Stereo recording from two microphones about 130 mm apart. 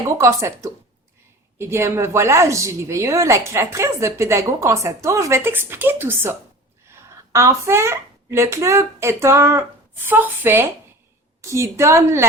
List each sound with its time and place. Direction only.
0.2 s a woman's voice: 25° right (ahead or behind)
7.3 s a woman's voice: 20° right (ahead or behind)